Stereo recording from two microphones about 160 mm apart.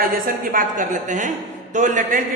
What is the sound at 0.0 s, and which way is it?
A woman's voice, 65° right (ahead or behind).